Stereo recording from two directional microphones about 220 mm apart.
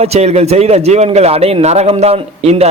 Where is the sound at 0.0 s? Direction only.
30° right (ahead or behind).